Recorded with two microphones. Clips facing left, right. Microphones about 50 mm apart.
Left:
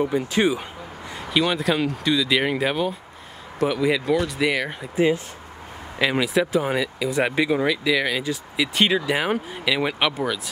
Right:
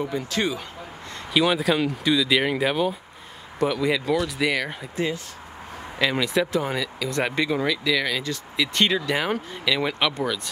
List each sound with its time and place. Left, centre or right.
0.0 s speech: centre
1.3 s speech: centre